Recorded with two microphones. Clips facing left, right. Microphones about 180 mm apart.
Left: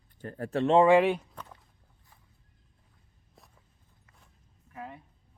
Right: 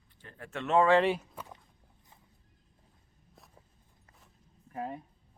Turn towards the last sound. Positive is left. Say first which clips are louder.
# right 5 dB
turn(degrees=-35)  # may be behind; listen again after turning